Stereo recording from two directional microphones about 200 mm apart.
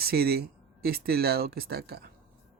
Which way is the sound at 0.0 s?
50° right (ahead or behind).